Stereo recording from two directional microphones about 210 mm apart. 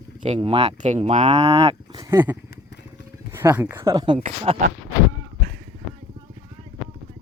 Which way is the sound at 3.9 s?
20° right (ahead or behind).